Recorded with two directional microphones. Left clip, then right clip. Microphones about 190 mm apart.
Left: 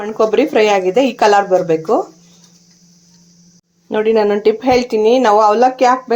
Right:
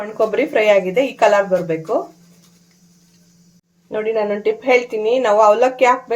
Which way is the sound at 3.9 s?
40° left (ahead or behind).